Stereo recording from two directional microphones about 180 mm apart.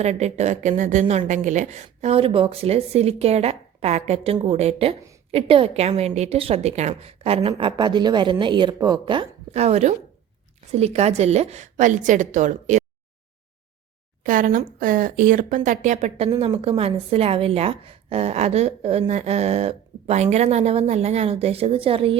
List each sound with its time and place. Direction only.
0.0 s speech: 40° right (ahead or behind)
14.3 s speech: 50° right (ahead or behind); by 22.2 s 30° right (ahead or behind)